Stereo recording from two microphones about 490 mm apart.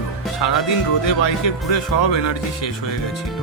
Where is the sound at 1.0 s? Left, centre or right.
Left.